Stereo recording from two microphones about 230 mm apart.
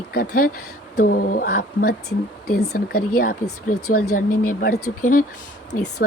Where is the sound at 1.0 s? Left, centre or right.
Left.